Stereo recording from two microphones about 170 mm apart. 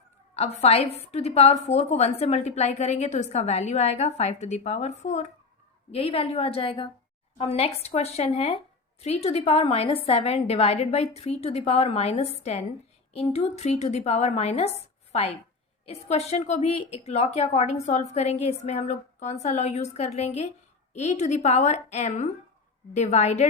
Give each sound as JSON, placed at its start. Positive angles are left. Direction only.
{"t": 0.3, "sound": "a woman's voice", "side_deg": 35}